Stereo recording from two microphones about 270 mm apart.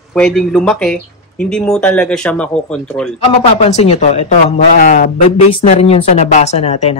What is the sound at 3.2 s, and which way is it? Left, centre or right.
Speech, left.